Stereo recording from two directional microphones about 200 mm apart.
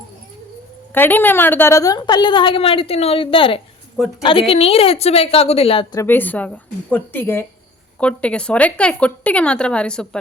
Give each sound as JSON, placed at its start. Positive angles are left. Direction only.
{"t": 0.9, "sound": "a woman's voice", "side_deg": 10}
{"t": 6.0, "sound": "a woman's voice", "side_deg": 10}